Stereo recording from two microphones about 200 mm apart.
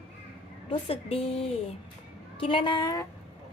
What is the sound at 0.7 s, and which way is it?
A woman's voice, 30° left (ahead or behind).